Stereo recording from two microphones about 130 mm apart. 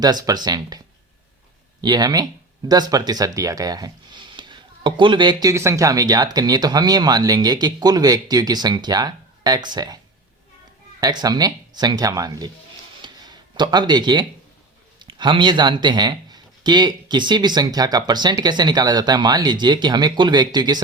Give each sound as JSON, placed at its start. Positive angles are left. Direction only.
{"t": 0.0, "sound": "speech", "side_deg": -30}
{"t": 1.8, "sound": "speech", "side_deg": -30}
{"t": 11.0, "sound": "speech", "side_deg": -30}
{"t": 13.0, "sound": "a sound", "side_deg": -35}
{"t": 14.9, "sound": "speech", "side_deg": -40}